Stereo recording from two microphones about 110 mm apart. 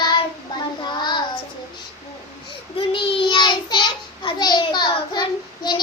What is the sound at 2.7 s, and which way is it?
Child singing, 55° left (ahead or behind).